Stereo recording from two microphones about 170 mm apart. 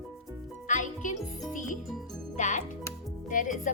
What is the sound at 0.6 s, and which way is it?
Music, 50° left (ahead or behind).